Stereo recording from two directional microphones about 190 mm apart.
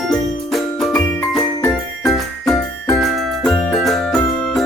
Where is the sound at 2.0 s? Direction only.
Centre (ahead or behind).